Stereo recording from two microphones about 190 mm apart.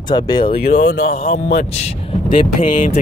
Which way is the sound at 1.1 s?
35° left (ahead or behind).